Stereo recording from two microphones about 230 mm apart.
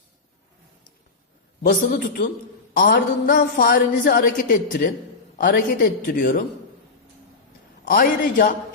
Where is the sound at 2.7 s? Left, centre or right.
Left.